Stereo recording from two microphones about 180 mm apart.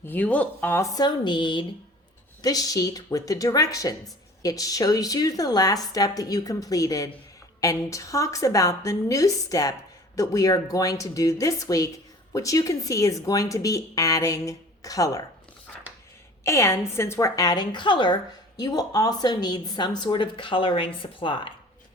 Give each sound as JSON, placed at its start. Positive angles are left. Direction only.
{"t": 0.0, "sound": "a woman's voice", "side_deg": 10}
{"t": 16.4, "sound": "a woman's voice", "side_deg": 15}